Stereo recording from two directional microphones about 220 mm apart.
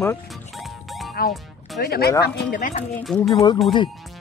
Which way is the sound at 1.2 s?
45° left (ahead or behind).